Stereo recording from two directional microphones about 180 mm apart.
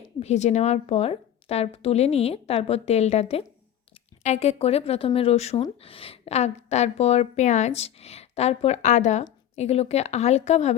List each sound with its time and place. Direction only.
0.2 s a woman's voice: 40° left (ahead or behind)